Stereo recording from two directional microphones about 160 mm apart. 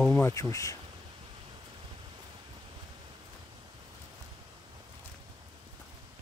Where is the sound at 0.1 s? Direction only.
15° left (ahead or behind).